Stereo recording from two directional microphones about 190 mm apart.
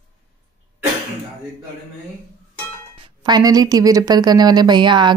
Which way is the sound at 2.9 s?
25° right (ahead or behind).